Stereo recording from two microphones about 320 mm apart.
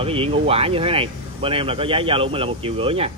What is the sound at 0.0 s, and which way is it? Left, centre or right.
Speech, centre.